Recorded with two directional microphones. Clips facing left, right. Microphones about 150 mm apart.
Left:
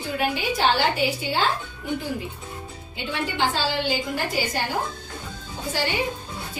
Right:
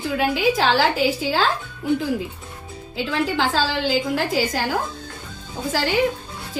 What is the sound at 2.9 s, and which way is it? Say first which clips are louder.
A woman's voice: right 5 dB; 90° right.